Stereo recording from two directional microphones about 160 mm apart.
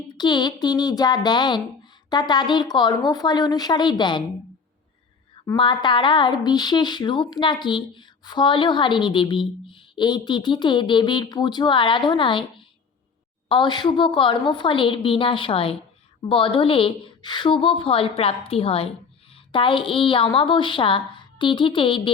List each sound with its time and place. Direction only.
0.1 s a woman's voice: 25° left (ahead or behind)
5.5 s a woman's voice: 30° left (ahead or behind)
13.5 s a woman's voice: 30° left (ahead or behind)